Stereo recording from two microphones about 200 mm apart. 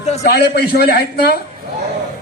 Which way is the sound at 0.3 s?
55° left (ahead or behind).